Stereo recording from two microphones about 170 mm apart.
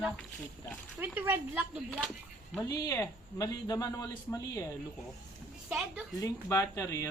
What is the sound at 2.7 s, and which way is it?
A man's voice, 20° left (ahead or behind).